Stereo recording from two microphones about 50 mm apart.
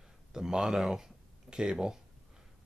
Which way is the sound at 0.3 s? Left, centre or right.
Centre.